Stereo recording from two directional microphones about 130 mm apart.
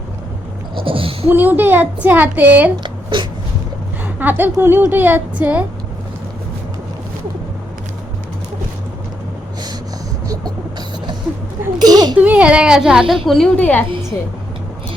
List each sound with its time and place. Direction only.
0.8 s speech: 45° right (ahead or behind)
1.3 s a woman's voice: 15° right (ahead or behind)
2.8 s a sound: 40° right (ahead or behind)
4.2 s a woman's voice: 15° right (ahead or behind)
11.8 s a child's voice: 30° right (ahead or behind)
12.2 s a woman's voice: 10° right (ahead or behind); by 13.8 s 10° left (ahead or behind)